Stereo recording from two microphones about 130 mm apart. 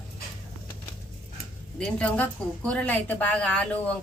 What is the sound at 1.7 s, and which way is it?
A woman's voice, 5° left (ahead or behind).